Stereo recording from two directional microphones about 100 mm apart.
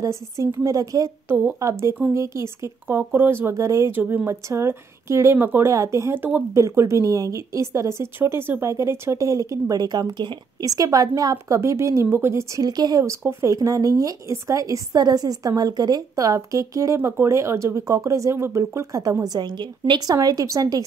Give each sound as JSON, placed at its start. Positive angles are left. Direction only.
{"t": 0.0, "sound": "a woman's voice", "side_deg": -35}
{"t": 4.0, "sound": "speech", "side_deg": -15}
{"t": 4.5, "sound": "a woman's voice", "side_deg": -25}
{"t": 12.6, "sound": "speech", "side_deg": -40}